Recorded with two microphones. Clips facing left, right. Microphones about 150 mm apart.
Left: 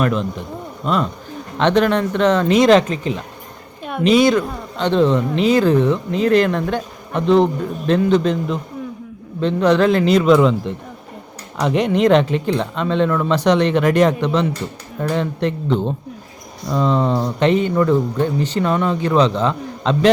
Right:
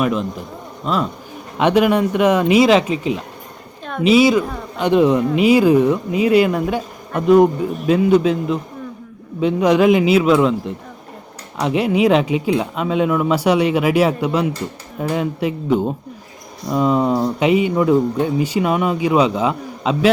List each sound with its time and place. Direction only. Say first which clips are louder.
0.0 s a woman's voice: even; 5° right (ahead or behind)